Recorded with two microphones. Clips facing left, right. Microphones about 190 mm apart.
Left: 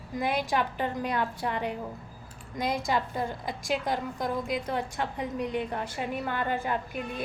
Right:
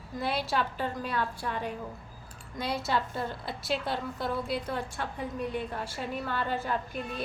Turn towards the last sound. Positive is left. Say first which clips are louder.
# left 2 dB
turn(degrees=10)  # may be behind; listen again after turning